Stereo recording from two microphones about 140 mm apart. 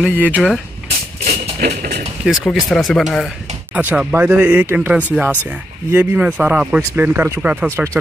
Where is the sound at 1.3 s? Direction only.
90° right.